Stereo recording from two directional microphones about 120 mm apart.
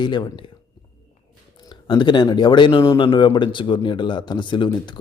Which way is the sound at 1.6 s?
40° left (ahead or behind).